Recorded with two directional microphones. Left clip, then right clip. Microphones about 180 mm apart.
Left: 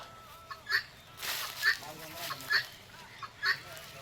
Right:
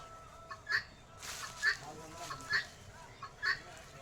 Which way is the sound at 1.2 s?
60° left (ahead or behind).